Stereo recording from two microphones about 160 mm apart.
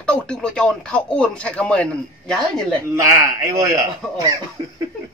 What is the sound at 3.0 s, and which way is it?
Speech, 20° right (ahead or behind).